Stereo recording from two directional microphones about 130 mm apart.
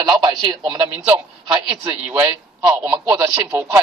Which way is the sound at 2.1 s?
25° right (ahead or behind).